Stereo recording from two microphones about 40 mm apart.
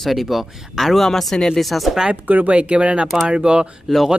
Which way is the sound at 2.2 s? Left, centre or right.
Right.